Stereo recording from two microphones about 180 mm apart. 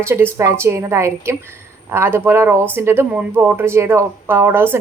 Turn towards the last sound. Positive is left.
turn(degrees=-10)  # may be behind; listen again after turning